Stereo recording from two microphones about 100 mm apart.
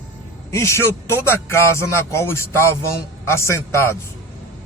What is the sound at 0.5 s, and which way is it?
Speech, 30° left (ahead or behind).